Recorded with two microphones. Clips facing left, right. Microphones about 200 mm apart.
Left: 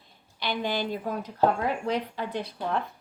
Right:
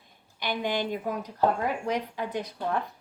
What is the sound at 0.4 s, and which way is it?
A woman's voice, 15° right (ahead or behind).